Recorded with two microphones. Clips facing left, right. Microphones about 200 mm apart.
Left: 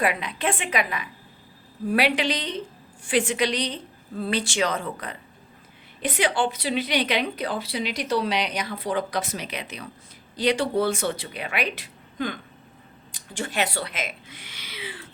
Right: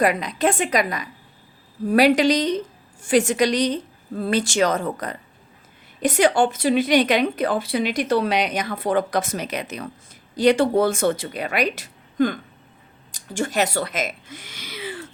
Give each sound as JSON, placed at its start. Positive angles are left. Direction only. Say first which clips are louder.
{"t": 0.0, "sound": "a woman's voice", "louder": "right 6 dB", "side_deg": -40}